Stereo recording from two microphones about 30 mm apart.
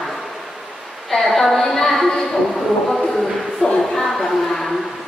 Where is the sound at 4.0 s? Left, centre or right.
Centre.